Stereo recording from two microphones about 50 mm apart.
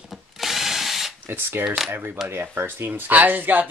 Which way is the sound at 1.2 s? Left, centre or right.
Right.